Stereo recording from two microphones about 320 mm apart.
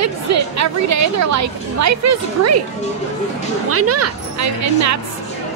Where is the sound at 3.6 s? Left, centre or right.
Right.